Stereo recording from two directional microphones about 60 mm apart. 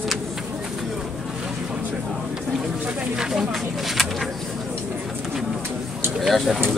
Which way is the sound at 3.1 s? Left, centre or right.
Centre.